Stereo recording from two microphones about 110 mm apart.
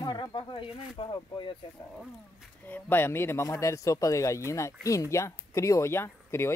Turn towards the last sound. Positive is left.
turn(degrees=25)  # may be behind; listen again after turning